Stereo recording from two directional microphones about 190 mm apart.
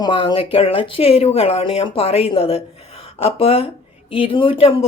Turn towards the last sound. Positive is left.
turn(degrees=30)  # may be behind; listen again after turning